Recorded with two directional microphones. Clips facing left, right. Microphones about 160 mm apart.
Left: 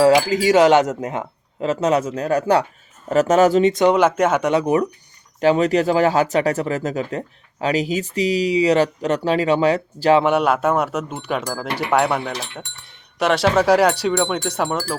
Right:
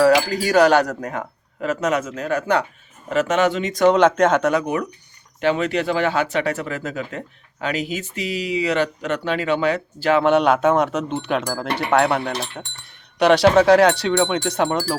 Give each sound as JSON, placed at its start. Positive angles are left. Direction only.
{"t": 0.0, "sound": "speech", "side_deg": 20}
{"t": 3.8, "sound": "speech", "side_deg": 10}
{"t": 4.5, "sound": "speech", "side_deg": 35}
{"t": 10.2, "sound": "speech", "side_deg": 5}